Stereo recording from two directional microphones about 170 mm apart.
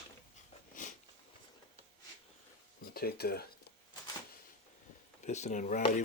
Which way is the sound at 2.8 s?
65° left (ahead or behind).